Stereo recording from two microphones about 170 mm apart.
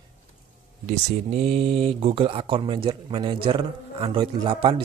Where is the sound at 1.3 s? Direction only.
35° right (ahead or behind).